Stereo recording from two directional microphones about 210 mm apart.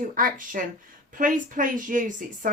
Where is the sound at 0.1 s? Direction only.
40° right (ahead or behind).